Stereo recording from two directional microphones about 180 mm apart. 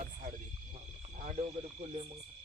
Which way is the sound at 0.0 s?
45° right (ahead or behind).